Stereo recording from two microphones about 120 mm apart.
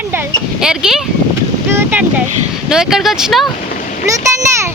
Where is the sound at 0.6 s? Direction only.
5° right (ahead or behind).